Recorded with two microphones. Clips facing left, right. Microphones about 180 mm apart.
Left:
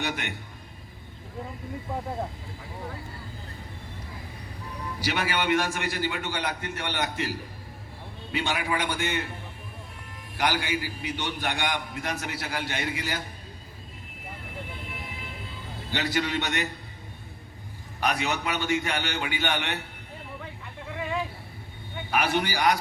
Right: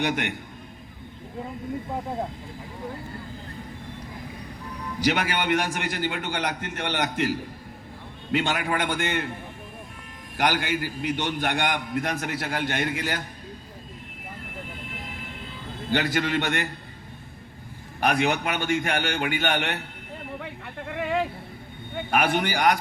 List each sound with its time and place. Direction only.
0.0 s a man's voice: 55° right (ahead or behind)
5.0 s a man's voice: 50° right (ahead or behind)
8.3 s a man's voice: 55° right (ahead or behind)
10.3 s a man's voice: 50° right (ahead or behind)
15.9 s a man's voice: 50° right (ahead or behind)
18.0 s a man's voice: 50° right (ahead or behind)
20.4 s a sound: 65° right (ahead or behind)
21.9 s speech: 55° right (ahead or behind)